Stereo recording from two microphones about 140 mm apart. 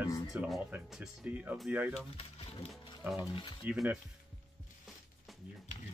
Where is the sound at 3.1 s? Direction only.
30° left (ahead or behind).